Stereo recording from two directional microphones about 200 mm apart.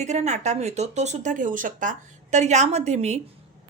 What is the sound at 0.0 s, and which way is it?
A woman's voice, 35° right (ahead or behind).